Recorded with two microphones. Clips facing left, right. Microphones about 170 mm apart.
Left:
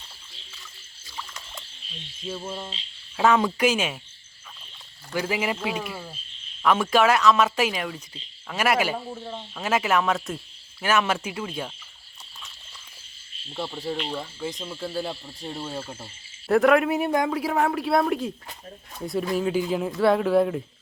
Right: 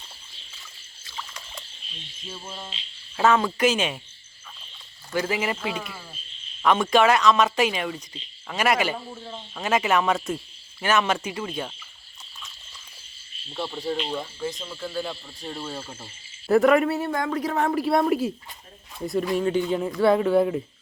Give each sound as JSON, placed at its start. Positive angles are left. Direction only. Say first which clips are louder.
{"t": 3.2, "sound": "speech", "louder": "even", "side_deg": 10}
{"t": 5.1, "sound": "speech", "louder": "right 1 dB", "side_deg": 10}
{"t": 13.5, "sound": "speech", "louder": "right 1 dB", "side_deg": 10}
{"t": 14.8, "sound": "speech", "louder": "left 1 dB", "side_deg": 30}
{"t": 15.4, "sound": "speech", "louder": "left 1 dB", "side_deg": 10}
{"t": 16.9, "sound": "speech", "louder": "left 2 dB", "side_deg": 15}